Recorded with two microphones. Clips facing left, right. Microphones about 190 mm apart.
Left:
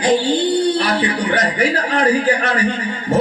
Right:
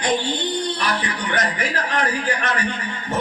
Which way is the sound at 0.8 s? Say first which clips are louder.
Left 7 dB; 35° left (ahead or behind).